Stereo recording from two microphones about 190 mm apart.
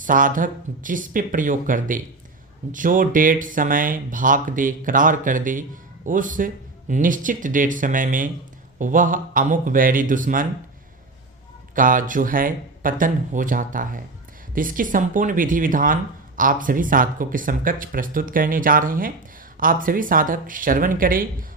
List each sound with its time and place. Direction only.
0.0 s speech: 45° right (ahead or behind)
11.7 s speech: 45° right (ahead or behind)